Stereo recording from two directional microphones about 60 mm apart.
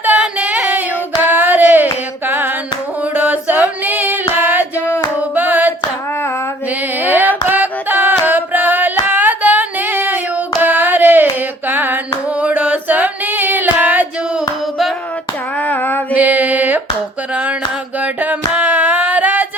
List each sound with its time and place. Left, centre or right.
0.2 s a sound: right
1.2 s a sound: right
3.2 s music: right
5.3 s hands: right
7.0 s a sound: right
11.7 s singing: right
12.4 s female singing: right
15.6 s mantra: left
16.1 s mantra: right
18.0 s music: right